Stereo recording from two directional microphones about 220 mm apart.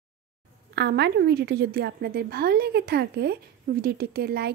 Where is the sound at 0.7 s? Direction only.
50° right (ahead or behind).